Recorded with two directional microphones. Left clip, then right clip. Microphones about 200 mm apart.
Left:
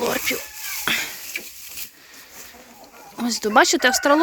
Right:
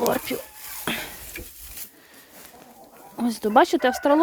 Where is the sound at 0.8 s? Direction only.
20° right (ahead or behind).